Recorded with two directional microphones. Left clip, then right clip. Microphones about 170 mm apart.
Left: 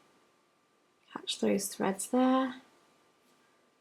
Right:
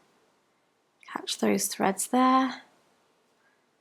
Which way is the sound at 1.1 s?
35° right (ahead or behind).